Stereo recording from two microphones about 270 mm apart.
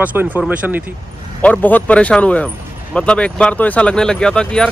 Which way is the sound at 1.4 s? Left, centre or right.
Centre.